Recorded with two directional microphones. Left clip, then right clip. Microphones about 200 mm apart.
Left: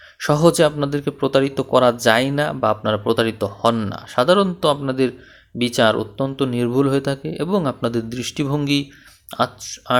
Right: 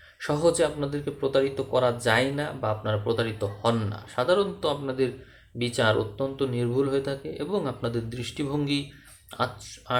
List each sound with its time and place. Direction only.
0.2 s speech: 45° left (ahead or behind)